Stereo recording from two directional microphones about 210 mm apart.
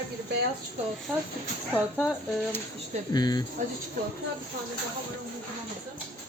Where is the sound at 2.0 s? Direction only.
10° left (ahead or behind).